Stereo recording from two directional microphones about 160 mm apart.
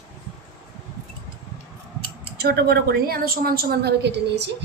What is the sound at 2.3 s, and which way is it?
A woman's voice, 85° right.